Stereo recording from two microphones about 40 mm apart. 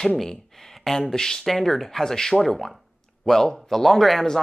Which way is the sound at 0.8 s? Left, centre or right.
Centre.